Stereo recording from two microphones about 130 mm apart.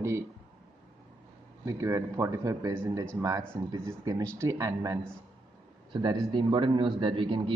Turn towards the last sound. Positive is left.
turn(degrees=-40)  # may be behind; listen again after turning